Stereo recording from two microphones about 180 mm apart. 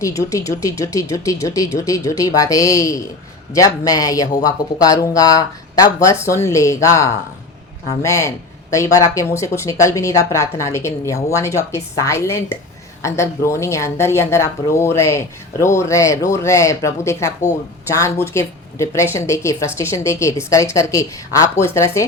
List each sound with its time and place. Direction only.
0.2 s a woman's voice: 15° left (ahead or behind)